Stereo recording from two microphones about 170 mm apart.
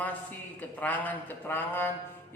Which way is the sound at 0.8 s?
10° left (ahead or behind).